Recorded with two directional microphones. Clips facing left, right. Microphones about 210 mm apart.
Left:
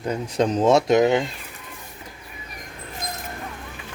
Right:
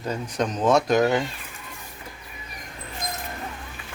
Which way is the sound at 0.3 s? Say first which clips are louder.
Left 3 dB; 30° left (ahead or behind).